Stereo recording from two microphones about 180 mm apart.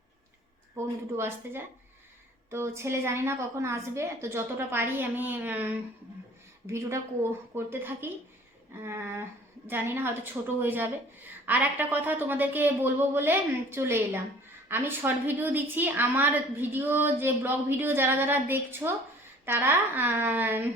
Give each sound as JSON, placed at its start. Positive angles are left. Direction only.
{"t": 0.8, "sound": "a woman's voice", "side_deg": -15}